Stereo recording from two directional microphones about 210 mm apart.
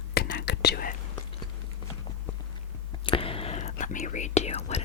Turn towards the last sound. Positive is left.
turn(degrees=30)  # may be behind; listen again after turning